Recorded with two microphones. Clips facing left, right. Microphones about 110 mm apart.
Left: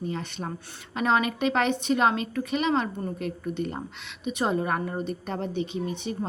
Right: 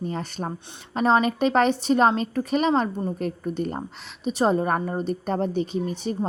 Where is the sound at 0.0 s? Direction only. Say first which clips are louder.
Right 3 dB; 40° right (ahead or behind).